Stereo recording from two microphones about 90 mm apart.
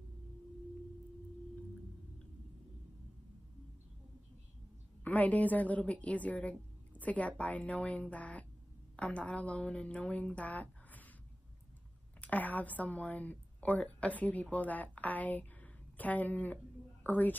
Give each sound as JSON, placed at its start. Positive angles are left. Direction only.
{"t": 5.0, "sound": "speech", "side_deg": 20}
{"t": 12.2, "sound": "a woman's voice", "side_deg": 15}